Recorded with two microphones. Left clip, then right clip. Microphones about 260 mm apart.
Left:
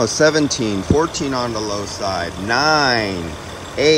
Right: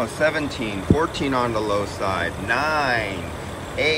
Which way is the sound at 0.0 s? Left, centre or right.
Left.